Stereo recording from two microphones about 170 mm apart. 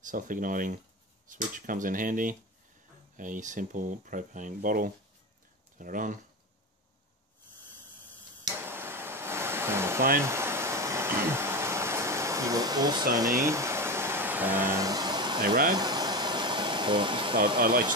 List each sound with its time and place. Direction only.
0.0 s speech: 50° right (ahead or behind)
8.5 s a sound: 15° right (ahead or behind)
13.1 s vehicle: 20° right (ahead or behind)
15.4 s speech: 60° right (ahead or behind)
15.7 s air conditioning: 25° right (ahead or behind)
17.6 s speech: 55° right (ahead or behind)